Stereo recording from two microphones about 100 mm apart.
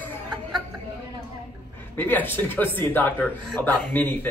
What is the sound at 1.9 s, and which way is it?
A man's voice, 20° left (ahead or behind).